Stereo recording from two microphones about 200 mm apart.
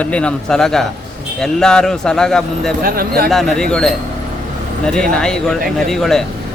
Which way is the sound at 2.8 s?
50° right (ahead or behind).